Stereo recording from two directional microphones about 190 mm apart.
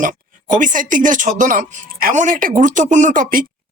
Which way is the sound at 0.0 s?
45° right (ahead or behind).